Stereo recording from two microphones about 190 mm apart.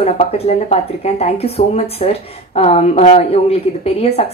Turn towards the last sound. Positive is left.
turn(degrees=30)  # may be behind; listen again after turning